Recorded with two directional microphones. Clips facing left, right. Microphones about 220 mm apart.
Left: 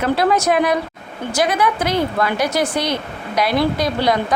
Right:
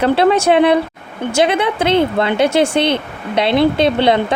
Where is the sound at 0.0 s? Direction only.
30° right (ahead or behind).